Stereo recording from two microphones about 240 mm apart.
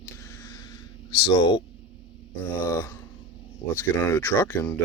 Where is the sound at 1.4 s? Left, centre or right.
Centre.